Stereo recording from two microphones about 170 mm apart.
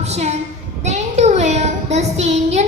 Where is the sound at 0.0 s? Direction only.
40° right (ahead or behind).